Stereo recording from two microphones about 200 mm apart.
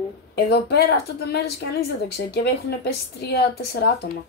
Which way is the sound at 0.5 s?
55° left (ahead or behind).